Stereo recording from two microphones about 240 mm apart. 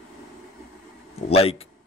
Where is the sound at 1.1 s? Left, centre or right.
Left.